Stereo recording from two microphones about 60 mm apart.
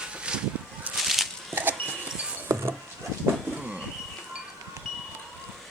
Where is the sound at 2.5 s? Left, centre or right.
Right.